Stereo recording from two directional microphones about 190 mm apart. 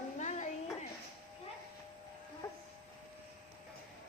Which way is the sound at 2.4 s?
20° left (ahead or behind).